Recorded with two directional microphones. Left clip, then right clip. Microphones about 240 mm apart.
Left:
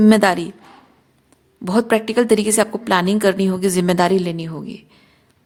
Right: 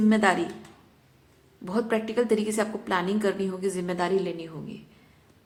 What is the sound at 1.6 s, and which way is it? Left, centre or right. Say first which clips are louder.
A woman's voice: left 10 dB; left.